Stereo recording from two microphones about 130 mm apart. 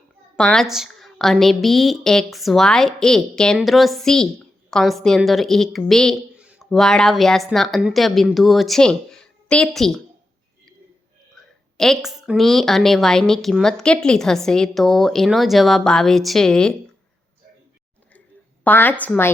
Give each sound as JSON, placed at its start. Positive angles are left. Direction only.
{"t": 0.3, "sound": "a woman's voice", "side_deg": 5}
{"t": 6.3, "sound": "a sound", "side_deg": -5}
{"t": 6.7, "sound": "a woman's voice", "side_deg": 5}
{"t": 11.3, "sound": "a woman's voice", "side_deg": 0}
{"t": 18.6, "sound": "a woman's voice", "side_deg": 15}